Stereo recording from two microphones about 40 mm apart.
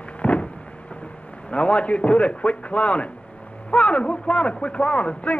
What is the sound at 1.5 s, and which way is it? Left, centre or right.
A man's voice, left.